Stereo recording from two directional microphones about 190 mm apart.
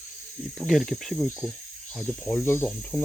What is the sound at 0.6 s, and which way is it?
Cricket, centre (ahead or behind).